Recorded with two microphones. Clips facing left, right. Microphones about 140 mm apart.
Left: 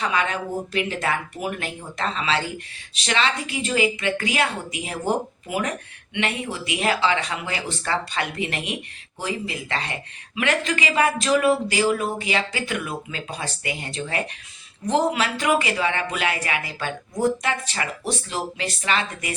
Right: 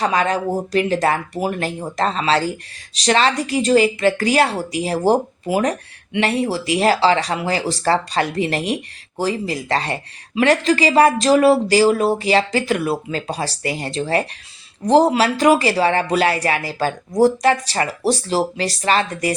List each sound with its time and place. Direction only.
0.0 s speech: 40° right (ahead or behind)